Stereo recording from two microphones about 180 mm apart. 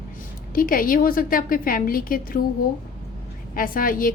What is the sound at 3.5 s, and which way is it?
Speech, 50° left (ahead or behind).